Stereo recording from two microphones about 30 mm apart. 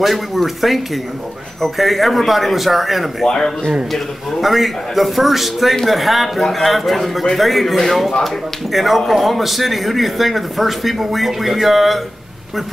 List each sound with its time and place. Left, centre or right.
0.0 s a man's voice: centre
3.3 s speech: centre
3.9 s a man's voice: centre